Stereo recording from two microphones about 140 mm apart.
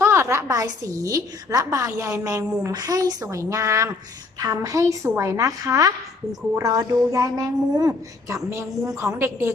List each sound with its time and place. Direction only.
0.0 s a woman's voice: 20° right (ahead or behind)